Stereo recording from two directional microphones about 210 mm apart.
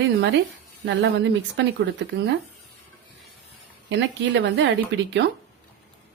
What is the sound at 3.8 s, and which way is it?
Speech, 60° right (ahead or behind).